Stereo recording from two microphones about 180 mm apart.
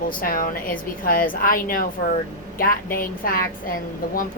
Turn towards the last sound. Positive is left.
turn(degrees=50)  # may be behind; listen again after turning